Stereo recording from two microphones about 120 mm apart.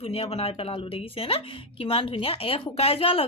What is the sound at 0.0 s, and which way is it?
A woman's voice, 55° left (ahead or behind).